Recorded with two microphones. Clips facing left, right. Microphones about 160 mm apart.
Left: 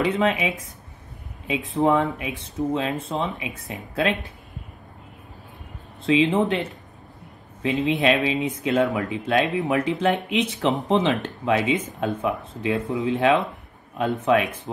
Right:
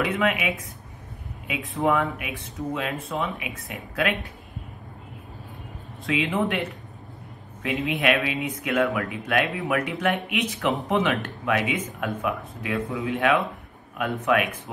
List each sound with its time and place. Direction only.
0.0 s speech: 30° left (ahead or behind)
1.8 s speech: 30° left (ahead or behind)
6.0 s speech: 25° left (ahead or behind)